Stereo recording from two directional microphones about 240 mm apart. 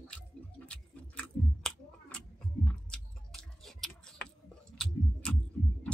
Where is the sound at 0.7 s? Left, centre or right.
Centre.